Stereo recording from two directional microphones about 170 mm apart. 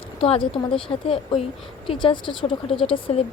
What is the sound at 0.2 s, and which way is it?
Speech, 30° left (ahead or behind).